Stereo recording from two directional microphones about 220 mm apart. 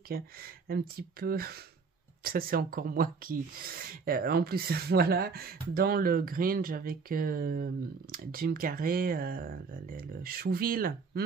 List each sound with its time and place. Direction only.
0.1 s speech: 45° right (ahead or behind)